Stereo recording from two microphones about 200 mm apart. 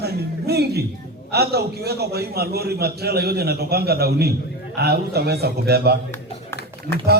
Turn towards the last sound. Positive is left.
turn(degrees=15)  # may be behind; listen again after turning